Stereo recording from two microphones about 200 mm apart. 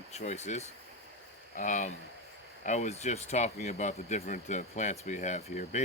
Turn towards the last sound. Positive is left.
turn(degrees=35)  # may be behind; listen again after turning